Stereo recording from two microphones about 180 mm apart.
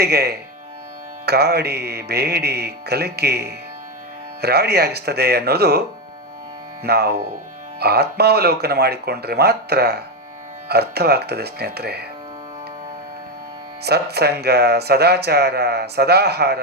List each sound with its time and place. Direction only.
0.0 s speech: 60° right (ahead or behind)
6.8 s speech: 65° right (ahead or behind)
13.8 s speech: 65° right (ahead or behind)